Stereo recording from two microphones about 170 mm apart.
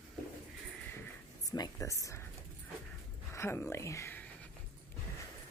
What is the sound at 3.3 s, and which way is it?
Speech, 15° left (ahead or behind).